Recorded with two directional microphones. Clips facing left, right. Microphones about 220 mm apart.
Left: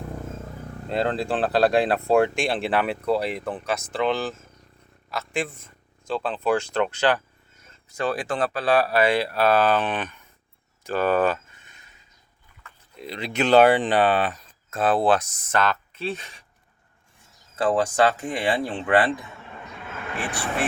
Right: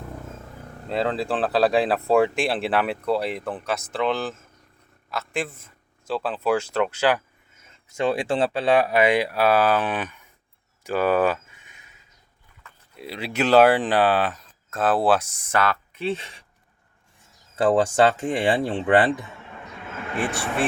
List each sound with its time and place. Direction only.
0.9 s speech: centre (ahead or behind)
7.9 s speech: 25° right (ahead or behind); by 10.2 s 10° right (ahead or behind)
10.8 s a sound: 10° right (ahead or behind)
13.0 s speech: 5° right (ahead or behind); by 16.3 s 25° right (ahead or behind)
17.6 s speech: 30° right (ahead or behind)